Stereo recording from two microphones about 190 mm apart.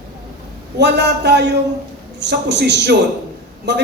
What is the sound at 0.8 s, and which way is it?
Speech, 60° right (ahead or behind).